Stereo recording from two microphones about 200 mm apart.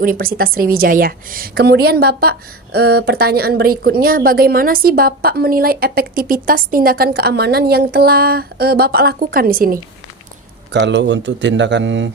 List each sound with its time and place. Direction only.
0.0 s a woman's voice: 45° right (ahead or behind)
10.7 s speech: 60° right (ahead or behind)